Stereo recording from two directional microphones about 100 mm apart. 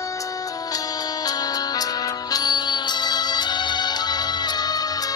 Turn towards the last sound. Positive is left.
turn(degrees=45)  # may be behind; listen again after turning